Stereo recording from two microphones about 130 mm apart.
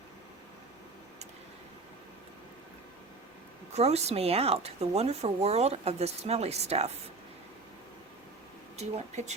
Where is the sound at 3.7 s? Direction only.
55° right (ahead or behind).